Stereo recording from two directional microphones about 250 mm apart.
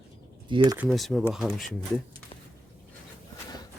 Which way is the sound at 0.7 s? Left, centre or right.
Centre.